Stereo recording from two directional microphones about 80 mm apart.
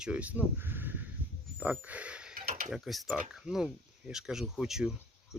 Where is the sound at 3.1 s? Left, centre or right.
Centre.